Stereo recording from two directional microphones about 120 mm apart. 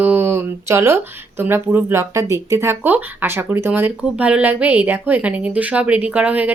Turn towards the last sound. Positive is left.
turn(degrees=-10)  # may be behind; listen again after turning